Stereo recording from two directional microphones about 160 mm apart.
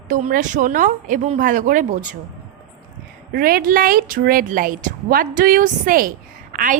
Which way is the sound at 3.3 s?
70° right (ahead or behind).